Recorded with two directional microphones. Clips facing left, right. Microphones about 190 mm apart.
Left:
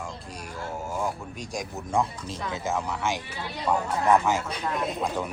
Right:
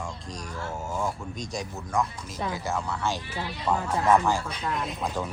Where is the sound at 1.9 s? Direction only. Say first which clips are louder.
Left 2 dB; 30° left (ahead or behind).